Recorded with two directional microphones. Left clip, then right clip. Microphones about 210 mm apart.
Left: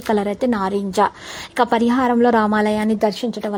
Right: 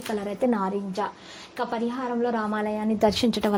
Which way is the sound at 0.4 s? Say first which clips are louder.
Even; 20° left (ahead or behind).